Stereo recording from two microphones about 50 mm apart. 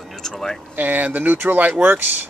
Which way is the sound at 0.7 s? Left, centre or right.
Right.